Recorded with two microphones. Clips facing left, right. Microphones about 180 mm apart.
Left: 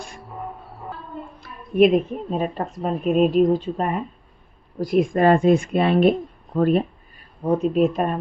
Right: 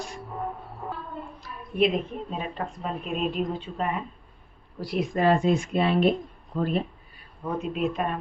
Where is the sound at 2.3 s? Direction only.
40° left (ahead or behind).